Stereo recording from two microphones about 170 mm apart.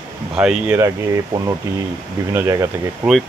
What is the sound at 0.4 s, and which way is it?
Speech, 5° right (ahead or behind).